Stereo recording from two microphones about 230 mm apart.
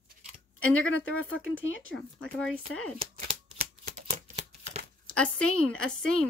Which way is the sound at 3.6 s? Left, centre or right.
Right.